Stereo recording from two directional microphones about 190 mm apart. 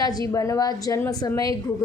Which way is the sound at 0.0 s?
20° left (ahead or behind).